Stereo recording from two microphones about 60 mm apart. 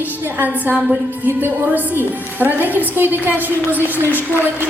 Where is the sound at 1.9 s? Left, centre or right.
Right.